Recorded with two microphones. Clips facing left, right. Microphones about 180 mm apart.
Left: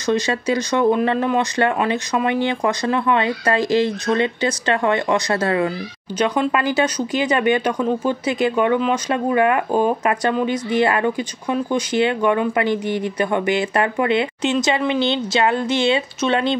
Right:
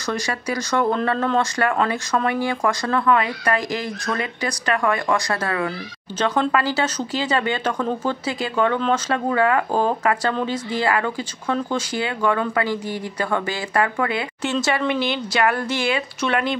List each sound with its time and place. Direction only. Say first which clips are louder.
0.0 s speech: left 6 dB; 20° left (ahead or behind)
6.1 s speech: left 1 dB; 15° left (ahead or behind)